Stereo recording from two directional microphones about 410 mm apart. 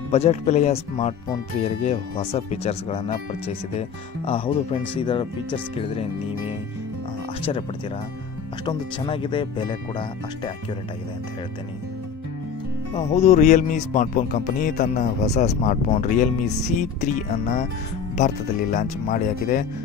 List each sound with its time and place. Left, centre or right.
0.1 s speech: centre
8.6 s speech: centre
12.9 s speech: centre